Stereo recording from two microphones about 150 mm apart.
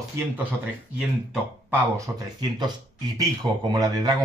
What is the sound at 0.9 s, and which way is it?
Speech, 5° right (ahead or behind).